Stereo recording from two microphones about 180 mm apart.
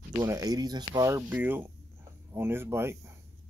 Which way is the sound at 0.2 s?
20° right (ahead or behind).